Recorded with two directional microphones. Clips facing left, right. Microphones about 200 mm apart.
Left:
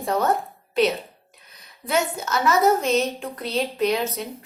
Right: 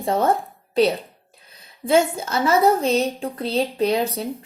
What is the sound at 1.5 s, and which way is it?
A woman's voice, 30° right (ahead or behind).